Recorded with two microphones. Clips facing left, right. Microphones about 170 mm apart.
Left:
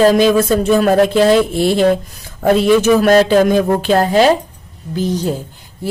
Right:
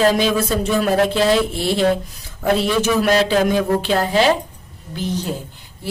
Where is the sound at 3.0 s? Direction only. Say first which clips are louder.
Left 6 dB; 50° left (ahead or behind).